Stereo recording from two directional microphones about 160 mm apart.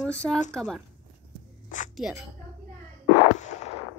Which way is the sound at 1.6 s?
50° left (ahead or behind).